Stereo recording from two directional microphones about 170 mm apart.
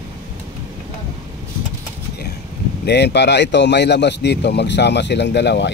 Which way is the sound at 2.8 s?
80° left.